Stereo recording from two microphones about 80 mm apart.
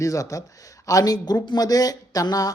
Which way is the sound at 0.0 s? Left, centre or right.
Left.